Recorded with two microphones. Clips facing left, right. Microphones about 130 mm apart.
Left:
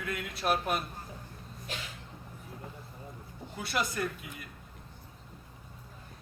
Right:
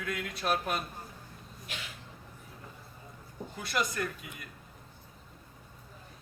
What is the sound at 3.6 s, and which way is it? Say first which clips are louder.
Speech: even; 5° left (ahead or behind).